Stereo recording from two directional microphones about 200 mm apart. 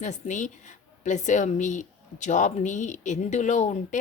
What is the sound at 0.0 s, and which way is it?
Speech, 40° left (ahead or behind).